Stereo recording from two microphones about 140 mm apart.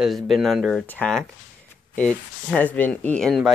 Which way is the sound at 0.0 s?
Centre (ahead or behind).